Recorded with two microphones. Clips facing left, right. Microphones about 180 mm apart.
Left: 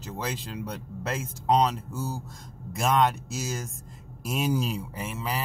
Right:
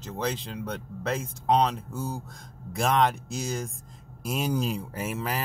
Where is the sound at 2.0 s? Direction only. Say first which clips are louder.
Even; 10° left (ahead or behind).